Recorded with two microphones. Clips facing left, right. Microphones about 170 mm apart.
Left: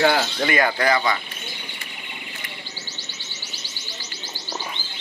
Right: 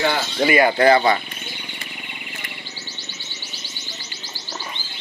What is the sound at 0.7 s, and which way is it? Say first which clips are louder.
Speech: right 6 dB; 35° right (ahead or behind).